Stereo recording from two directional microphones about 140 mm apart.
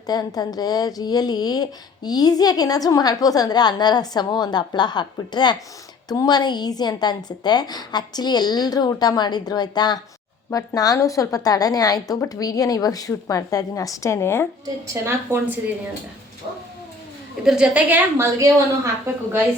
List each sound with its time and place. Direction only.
0.1 s a woman's voice: 30° left (ahead or behind)
15.0 s a woman's voice: 20° right (ahead or behind)
17.4 s a woman's voice: 5° right (ahead or behind)